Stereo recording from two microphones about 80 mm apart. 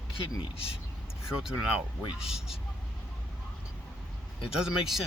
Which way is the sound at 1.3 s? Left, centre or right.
Centre.